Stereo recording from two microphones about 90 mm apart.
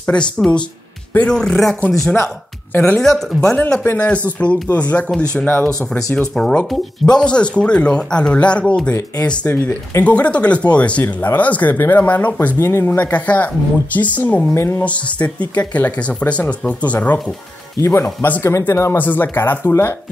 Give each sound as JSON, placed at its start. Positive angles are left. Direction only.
{"t": 0.0, "sound": "speech", "side_deg": 10}
{"t": 3.5, "sound": "speech", "side_deg": 15}
{"t": 14.9, "sound": "speech", "side_deg": 15}
{"t": 17.7, "sound": "speech", "side_deg": 30}